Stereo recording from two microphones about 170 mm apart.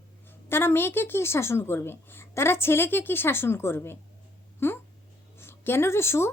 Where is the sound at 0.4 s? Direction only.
15° left (ahead or behind).